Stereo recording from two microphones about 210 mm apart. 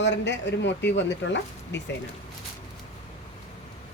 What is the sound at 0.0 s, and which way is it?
Speech, 55° left (ahead or behind).